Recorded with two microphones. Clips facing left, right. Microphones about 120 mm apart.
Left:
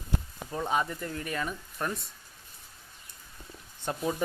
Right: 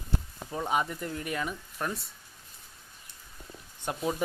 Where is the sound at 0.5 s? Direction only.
10° right (ahead or behind).